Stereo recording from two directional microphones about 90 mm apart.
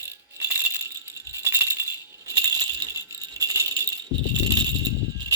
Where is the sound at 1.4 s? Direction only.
25° right (ahead or behind).